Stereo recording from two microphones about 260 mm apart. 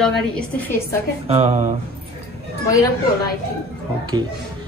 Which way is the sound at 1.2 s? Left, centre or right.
Right.